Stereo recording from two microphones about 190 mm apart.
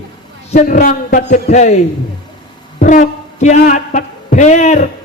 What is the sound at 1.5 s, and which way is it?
Speech, 40° left (ahead or behind).